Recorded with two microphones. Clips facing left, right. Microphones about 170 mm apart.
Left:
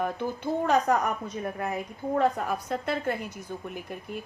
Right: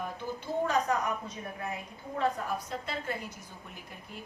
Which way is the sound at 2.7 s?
55° left (ahead or behind).